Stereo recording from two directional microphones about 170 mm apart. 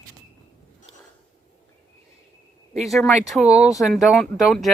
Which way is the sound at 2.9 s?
Centre (ahead or behind).